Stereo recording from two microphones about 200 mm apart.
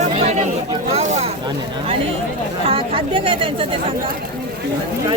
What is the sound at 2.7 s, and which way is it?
Speech, 25° right (ahead or behind).